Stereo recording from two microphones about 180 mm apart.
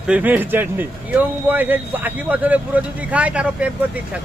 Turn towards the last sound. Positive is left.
turn(degrees=-5)  # may be behind; listen again after turning